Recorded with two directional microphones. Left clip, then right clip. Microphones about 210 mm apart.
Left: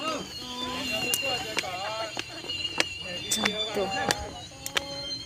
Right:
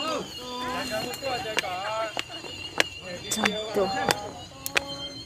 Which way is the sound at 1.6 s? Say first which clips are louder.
Right 3 dB; 30° right (ahead or behind).